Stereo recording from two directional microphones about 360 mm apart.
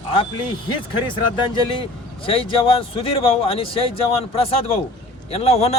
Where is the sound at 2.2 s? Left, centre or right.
Centre.